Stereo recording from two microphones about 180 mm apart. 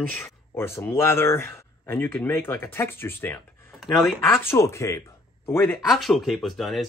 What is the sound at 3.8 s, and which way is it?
Speech, centre (ahead or behind).